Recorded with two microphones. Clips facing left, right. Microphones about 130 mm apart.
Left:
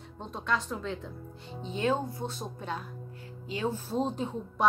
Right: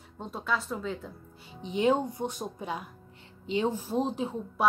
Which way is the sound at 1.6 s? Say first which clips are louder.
Right 4 dB; 15° right (ahead or behind).